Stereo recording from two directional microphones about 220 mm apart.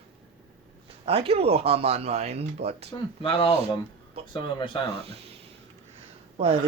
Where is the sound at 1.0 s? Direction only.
25° right (ahead or behind).